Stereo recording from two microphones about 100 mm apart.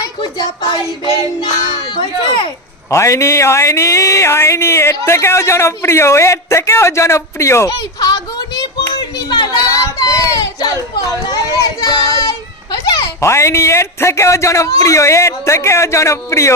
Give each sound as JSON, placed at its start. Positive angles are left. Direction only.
{"t": 1.4, "sound": "a child's voice", "side_deg": 55}
{"t": 2.9, "sound": "speech", "side_deg": 30}
{"t": 7.7, "sound": "a sound", "side_deg": 40}
{"t": 10.0, "sound": "speech", "side_deg": 35}